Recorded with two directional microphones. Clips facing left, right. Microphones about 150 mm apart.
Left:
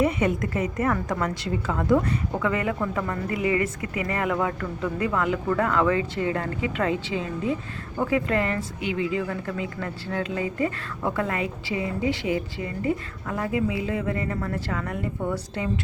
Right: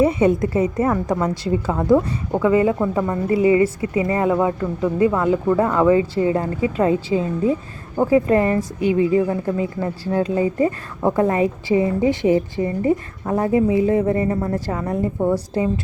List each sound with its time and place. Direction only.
0.0 s a woman's voice: 30° right (ahead or behind)
9.2 s speech: 30° right (ahead or behind)